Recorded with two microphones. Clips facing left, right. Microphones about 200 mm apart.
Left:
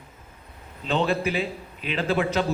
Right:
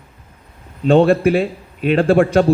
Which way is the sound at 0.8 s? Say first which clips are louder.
Right 12 dB; 55° right (ahead or behind).